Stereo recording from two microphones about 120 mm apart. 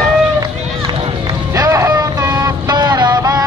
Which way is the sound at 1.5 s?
30° right (ahead or behind).